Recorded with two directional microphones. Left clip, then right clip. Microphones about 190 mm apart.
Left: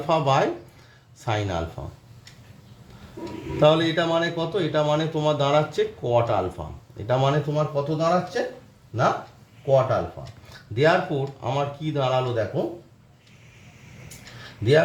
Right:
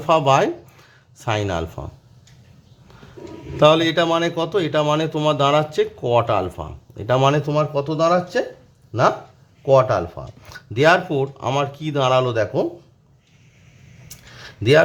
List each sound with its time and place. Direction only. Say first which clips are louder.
0.1 s speech: right 5 dB; 25° right (ahead or behind)
3.6 s speech: right 5 dB; 30° right (ahead or behind)
7.5 s speech: right 4 dB; 50° right (ahead or behind)
9.6 s speech: right 5 dB; 45° right (ahead or behind)
10.4 s speech: right 5 dB; 35° right (ahead or behind)